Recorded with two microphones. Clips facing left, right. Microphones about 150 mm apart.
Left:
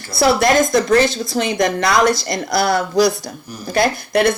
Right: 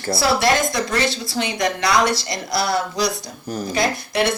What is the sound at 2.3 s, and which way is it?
A woman's voice, 50° left (ahead or behind).